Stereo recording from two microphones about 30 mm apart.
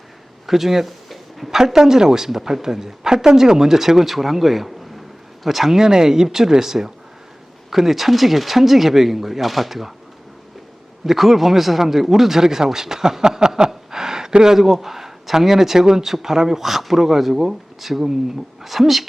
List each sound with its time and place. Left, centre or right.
0.4 s a sound: centre
1.5 s speech: centre
11.0 s speech: centre